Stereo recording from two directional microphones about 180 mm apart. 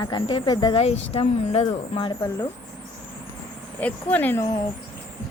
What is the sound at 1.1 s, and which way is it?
Speech, 35° left (ahead or behind).